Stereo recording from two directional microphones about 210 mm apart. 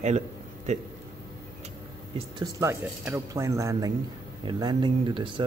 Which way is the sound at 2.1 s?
20° right (ahead or behind).